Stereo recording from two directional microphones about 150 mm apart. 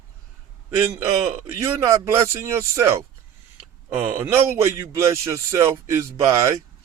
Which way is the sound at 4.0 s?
15° right (ahead or behind).